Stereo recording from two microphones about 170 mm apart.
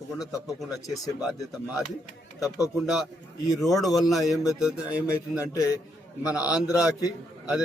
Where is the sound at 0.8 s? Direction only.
20° left (ahead or behind).